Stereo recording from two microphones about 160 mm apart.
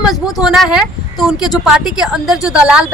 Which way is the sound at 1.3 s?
25° left (ahead or behind).